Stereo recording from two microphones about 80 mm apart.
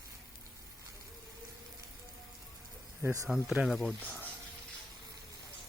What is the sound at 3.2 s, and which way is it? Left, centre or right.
Speech, centre.